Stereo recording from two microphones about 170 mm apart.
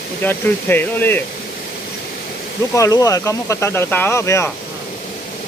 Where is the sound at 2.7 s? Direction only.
20° left (ahead or behind).